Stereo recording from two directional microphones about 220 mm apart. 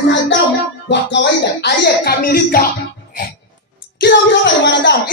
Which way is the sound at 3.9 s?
50° left (ahead or behind).